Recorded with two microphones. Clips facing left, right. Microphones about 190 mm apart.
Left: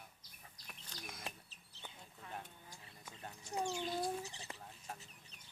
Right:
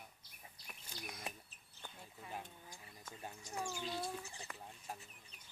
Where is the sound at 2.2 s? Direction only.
10° right (ahead or behind).